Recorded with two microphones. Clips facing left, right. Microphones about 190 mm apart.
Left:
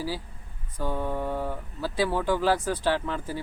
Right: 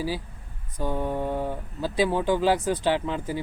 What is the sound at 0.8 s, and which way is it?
Speech, 15° right (ahead or behind).